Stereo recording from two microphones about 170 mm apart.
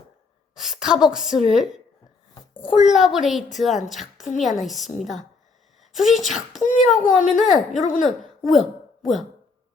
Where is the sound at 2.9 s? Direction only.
Centre (ahead or behind).